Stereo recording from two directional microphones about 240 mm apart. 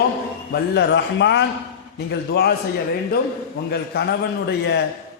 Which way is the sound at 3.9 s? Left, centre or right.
Left.